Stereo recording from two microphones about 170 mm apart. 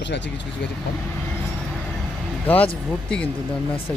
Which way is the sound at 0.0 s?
90° left.